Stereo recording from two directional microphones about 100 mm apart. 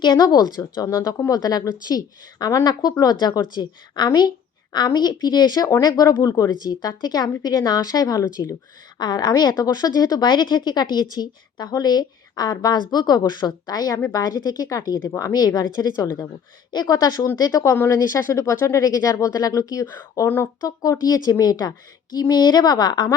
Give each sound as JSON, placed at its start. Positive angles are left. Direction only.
{"t": 0.0, "sound": "a woman's voice", "side_deg": 45}
{"t": 19.8, "sound": "speech", "side_deg": 25}
{"t": 20.6, "sound": "a woman's voice", "side_deg": 35}